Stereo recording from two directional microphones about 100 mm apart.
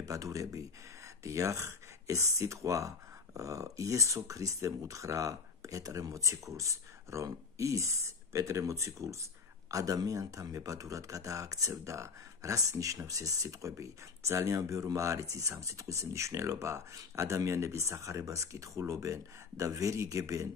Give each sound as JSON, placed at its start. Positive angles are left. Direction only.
{"t": 0.0, "sound": "speech", "side_deg": -35}